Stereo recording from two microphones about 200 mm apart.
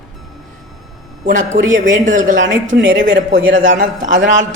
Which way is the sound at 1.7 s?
40° right (ahead or behind).